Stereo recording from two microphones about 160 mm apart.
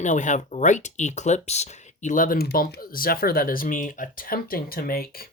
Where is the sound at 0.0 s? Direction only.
50° left (ahead or behind).